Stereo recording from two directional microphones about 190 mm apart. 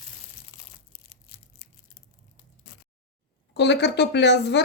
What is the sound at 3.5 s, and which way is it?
A woman's voice, 65° left (ahead or behind).